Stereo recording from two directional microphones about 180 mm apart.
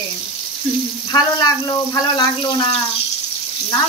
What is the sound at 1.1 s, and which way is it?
Speech, 25° left (ahead or behind).